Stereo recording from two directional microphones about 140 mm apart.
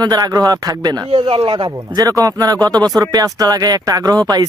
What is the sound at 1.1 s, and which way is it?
Speech, 40° right (ahead or behind).